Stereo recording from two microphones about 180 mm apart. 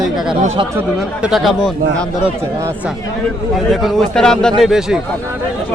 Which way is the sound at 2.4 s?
15° right (ahead or behind).